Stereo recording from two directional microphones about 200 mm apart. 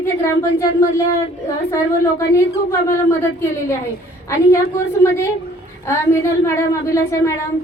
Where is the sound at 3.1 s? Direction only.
10° left (ahead or behind).